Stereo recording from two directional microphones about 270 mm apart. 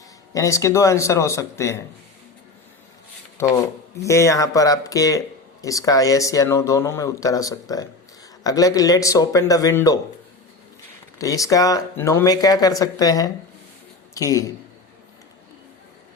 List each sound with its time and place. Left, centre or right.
0.3 s speech: centre
4.0 s speech: centre
11.2 s speech: centre